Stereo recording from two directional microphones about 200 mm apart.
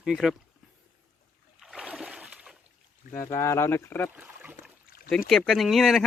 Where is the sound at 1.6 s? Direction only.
Centre (ahead or behind).